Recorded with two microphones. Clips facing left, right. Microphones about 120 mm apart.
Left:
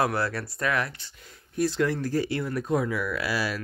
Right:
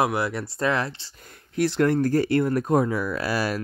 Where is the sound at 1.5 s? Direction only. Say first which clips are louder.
Right 3 dB; 90° right.